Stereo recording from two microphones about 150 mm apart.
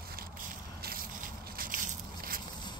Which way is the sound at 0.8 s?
75° right (ahead or behind).